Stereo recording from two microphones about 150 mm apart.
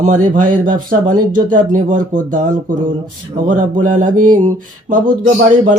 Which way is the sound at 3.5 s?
60° right (ahead or behind).